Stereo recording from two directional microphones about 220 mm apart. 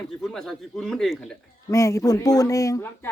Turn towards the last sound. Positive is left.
turn(degrees=10)  # may be behind; listen again after turning